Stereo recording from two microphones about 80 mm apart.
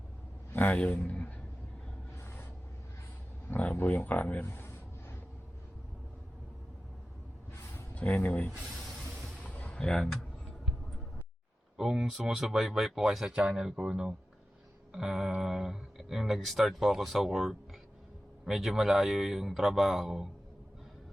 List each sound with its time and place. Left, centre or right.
0.5 s a man's voice: centre
2.2 s vehicle: left
3.5 s speech: left
4.4 s a sound: left
7.9 s speech: left
8.7 s a sound: centre
9.4 s a sound: centre
9.7 s speech: centre
11.8 s speech: centre